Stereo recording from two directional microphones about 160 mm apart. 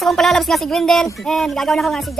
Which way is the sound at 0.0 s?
Centre (ahead or behind).